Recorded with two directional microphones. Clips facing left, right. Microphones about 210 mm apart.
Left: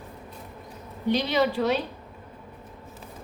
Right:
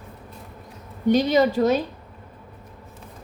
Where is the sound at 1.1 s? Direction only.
45° right (ahead or behind).